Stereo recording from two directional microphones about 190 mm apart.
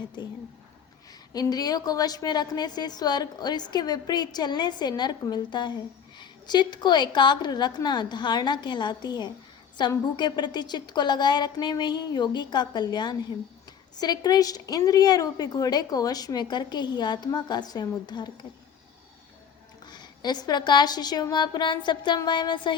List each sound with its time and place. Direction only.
1.3 s a woman's voice: 20° left (ahead or behind)
19.8 s a woman's voice: 20° left (ahead or behind)